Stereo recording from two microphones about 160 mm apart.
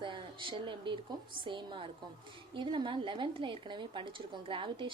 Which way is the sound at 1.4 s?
30° right (ahead or behind).